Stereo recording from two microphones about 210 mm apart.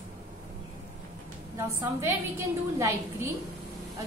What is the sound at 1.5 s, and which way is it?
A woman's voice, 10° right (ahead or behind).